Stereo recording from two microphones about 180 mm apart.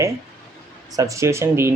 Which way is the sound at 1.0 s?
15° right (ahead or behind).